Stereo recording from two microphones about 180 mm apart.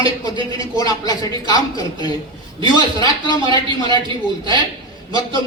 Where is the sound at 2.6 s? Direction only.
25° right (ahead or behind).